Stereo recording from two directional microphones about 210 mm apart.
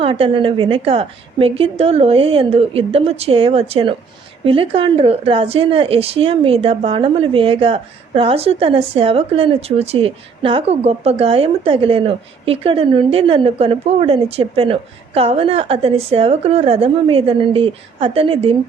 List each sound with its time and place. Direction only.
0.0 s a woman's voice: 25° right (ahead or behind)